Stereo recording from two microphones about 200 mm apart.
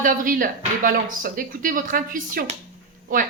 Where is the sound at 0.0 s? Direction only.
45° right (ahead or behind).